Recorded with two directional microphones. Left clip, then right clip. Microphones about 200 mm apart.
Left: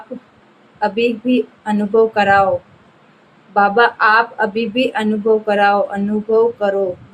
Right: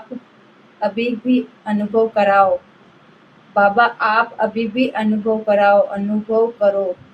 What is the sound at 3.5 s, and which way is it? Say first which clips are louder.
A woman's voice: left 1 dB; 50° left (ahead or behind).